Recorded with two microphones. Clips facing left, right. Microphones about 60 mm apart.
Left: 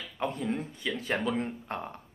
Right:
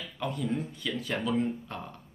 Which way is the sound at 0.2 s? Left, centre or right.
Left.